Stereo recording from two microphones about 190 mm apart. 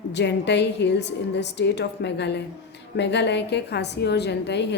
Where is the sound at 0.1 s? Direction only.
65° left (ahead or behind).